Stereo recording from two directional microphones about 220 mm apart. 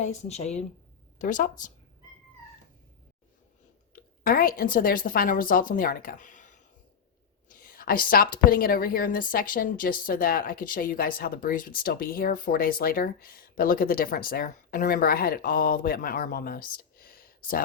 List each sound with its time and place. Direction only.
0.0 s a woman's voice: 30° left (ahead or behind)
3.9 s a woman's voice: 40° left (ahead or behind)